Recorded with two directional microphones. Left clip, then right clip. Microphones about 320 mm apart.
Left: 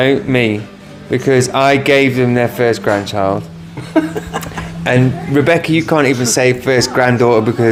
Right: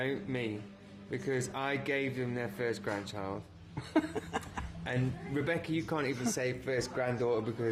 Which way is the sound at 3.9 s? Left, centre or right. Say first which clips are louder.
Left 17 dB; right.